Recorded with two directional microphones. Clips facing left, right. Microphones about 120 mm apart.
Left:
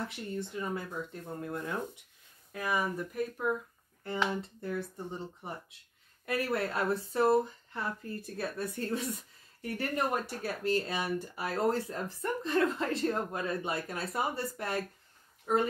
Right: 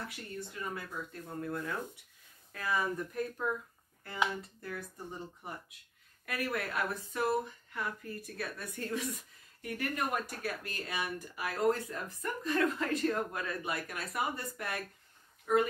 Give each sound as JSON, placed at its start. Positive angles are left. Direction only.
{"t": 0.0, "sound": "speech", "side_deg": 25}
{"t": 4.4, "sound": "speech", "side_deg": 25}